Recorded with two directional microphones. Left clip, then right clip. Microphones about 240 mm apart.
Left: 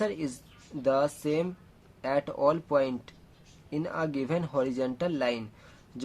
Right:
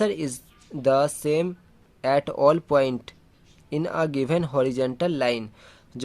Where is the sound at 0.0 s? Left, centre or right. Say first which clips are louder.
Right 6 dB; right.